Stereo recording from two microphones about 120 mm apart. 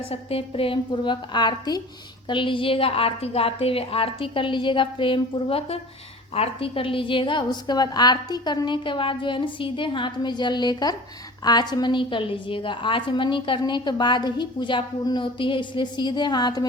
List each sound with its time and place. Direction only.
0.0 s a woman's voice: 55° left (ahead or behind); by 16.6 s 35° left (ahead or behind)